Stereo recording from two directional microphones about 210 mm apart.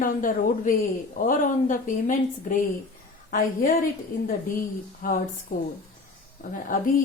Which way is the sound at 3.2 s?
40° left (ahead or behind).